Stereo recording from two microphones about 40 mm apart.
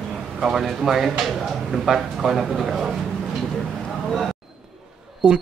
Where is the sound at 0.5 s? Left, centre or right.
Centre.